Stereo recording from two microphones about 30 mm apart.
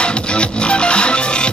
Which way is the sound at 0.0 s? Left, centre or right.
Left.